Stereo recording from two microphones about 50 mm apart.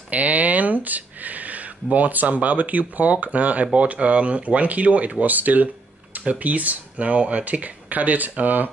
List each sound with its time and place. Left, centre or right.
0.1 s speech: right